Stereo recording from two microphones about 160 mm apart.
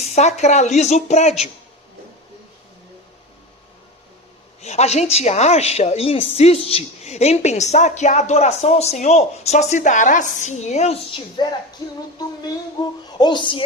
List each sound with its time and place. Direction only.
0.0 s a woman's voice: 45° left (ahead or behind)
4.6 s a woman's voice: 45° left (ahead or behind)
11.4 s music: 30° left (ahead or behind)
13.1 s speech: 25° left (ahead or behind)